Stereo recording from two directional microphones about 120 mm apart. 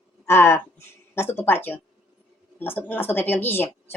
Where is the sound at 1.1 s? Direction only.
20° left (ahead or behind).